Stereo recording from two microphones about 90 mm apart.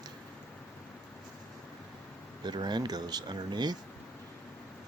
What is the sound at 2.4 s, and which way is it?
Speech, 50° right (ahead or behind).